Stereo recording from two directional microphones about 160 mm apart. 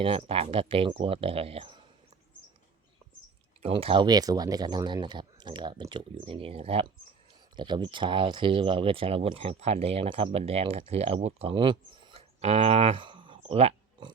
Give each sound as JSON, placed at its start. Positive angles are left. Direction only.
{"t": 0.0, "sound": "speech", "side_deg": -35}
{"t": 3.6, "sound": "speech", "side_deg": -35}